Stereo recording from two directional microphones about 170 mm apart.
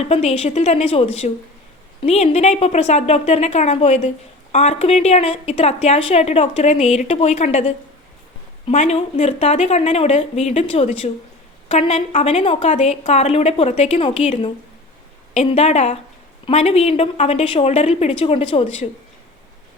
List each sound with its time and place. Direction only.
0.0 s a woman's voice: 40° left (ahead or behind)
8.6 s a woman's voice: 40° left (ahead or behind)